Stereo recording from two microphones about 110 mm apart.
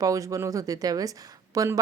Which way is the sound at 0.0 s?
30° right (ahead or behind).